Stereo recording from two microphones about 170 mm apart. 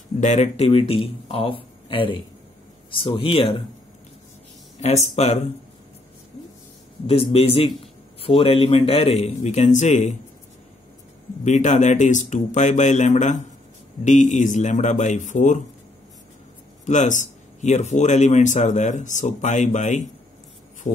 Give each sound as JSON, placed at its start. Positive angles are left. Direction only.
{"t": 0.2, "sound": "a man's voice", "side_deg": 40}
{"t": 4.7, "sound": "a man's voice", "side_deg": 40}
{"t": 7.1, "sound": "a man's voice", "side_deg": 35}
{"t": 11.4, "sound": "speech", "side_deg": 45}
{"t": 16.8, "sound": "speech", "side_deg": 45}